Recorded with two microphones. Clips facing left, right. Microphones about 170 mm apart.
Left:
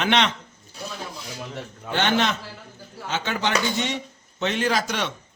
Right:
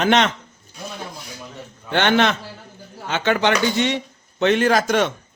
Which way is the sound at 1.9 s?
65° right (ahead or behind).